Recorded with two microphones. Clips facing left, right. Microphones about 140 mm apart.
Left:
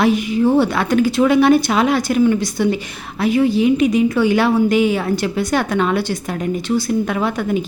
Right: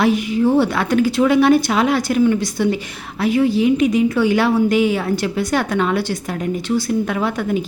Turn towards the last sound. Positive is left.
turn(degrees=25)  # may be behind; listen again after turning